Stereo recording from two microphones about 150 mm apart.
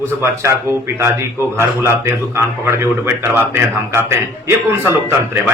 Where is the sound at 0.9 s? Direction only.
15° right (ahead or behind).